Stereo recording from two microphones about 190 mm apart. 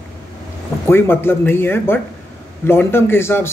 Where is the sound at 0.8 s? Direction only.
10° left (ahead or behind).